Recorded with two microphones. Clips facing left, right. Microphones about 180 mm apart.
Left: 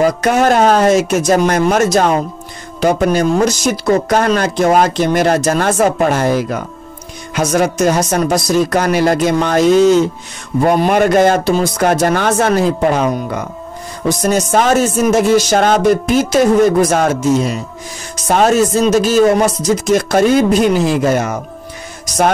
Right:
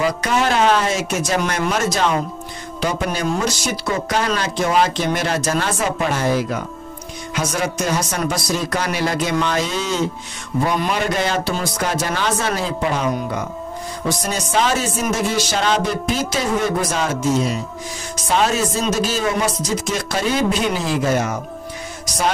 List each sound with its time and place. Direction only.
0.0 s speech: 45° left (ahead or behind)